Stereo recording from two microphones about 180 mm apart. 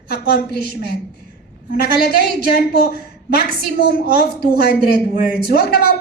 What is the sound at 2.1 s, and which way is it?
A woman's voice, 60° left (ahead or behind).